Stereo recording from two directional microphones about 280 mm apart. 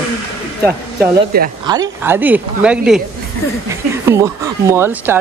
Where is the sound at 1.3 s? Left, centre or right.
Right.